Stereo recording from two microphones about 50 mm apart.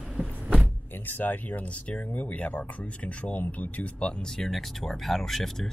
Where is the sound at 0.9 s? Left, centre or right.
Left.